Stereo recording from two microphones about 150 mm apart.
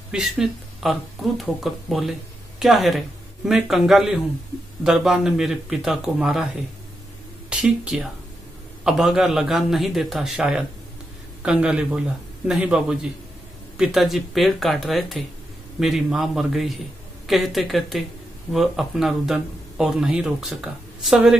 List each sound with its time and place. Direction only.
0.1 s speech: 5° right (ahead or behind)
7.4 s a man's voice: 5° right (ahead or behind)